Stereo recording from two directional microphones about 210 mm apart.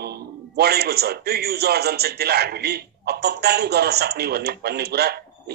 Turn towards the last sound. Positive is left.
turn(degrees=-50)  # may be behind; listen again after turning